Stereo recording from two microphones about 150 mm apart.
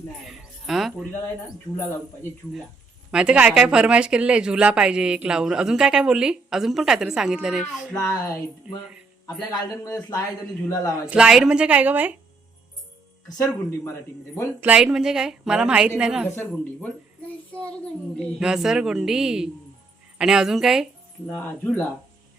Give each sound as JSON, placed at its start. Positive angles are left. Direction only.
{"t": 0.3, "sound": "music", "side_deg": 0}
{"t": 1.2, "sound": "speech", "side_deg": 20}
{"t": 3.1, "sound": "speech", "side_deg": -5}
{"t": 7.9, "sound": "speech", "side_deg": 25}
{"t": 9.4, "sound": "speech", "side_deg": 25}
{"t": 11.0, "sound": "a woman's voice", "side_deg": -5}
{"t": 13.2, "sound": "speech", "side_deg": 20}
{"t": 14.6, "sound": "speech", "side_deg": -5}
{"t": 16.3, "sound": "speech", "side_deg": 15}
{"t": 18.3, "sound": "speech", "side_deg": -5}
{"t": 21.2, "sound": "speech", "side_deg": 10}